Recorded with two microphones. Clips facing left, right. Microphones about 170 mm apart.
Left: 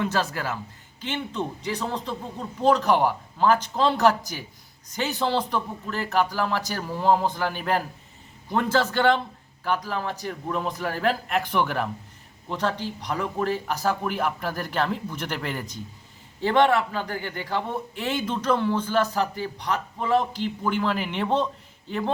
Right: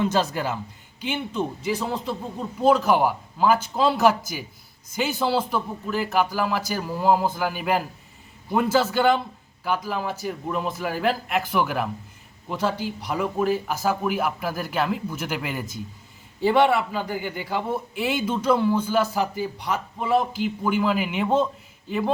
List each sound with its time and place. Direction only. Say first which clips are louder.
0.0 s a man's voice: right 3 dB; 20° right (ahead or behind)